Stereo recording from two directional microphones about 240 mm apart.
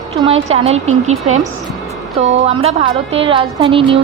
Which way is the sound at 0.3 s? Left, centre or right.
Right.